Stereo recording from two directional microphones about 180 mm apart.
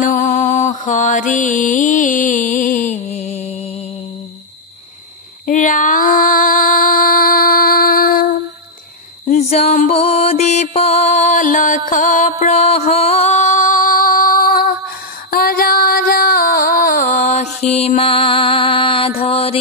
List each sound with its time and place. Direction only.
0.0 s mantra: 45° left (ahead or behind)
5.5 s female singing: 45° left (ahead or behind)
9.2 s mantra: 35° left (ahead or behind); by 14.7 s 55° left (ahead or behind)
15.3 s music: 55° left (ahead or behind)
17.6 s mantra: 35° left (ahead or behind)